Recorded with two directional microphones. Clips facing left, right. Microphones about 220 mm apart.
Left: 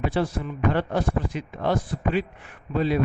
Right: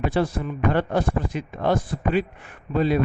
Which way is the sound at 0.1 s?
50° right (ahead or behind).